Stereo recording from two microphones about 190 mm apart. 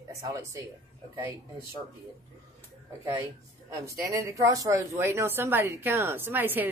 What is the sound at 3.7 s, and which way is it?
Speech, 15° right (ahead or behind).